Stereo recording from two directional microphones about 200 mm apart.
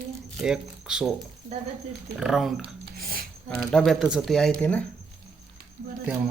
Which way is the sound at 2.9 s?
45° right (ahead or behind).